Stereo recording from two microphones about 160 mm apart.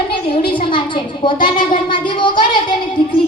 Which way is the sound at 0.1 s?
30° left (ahead or behind).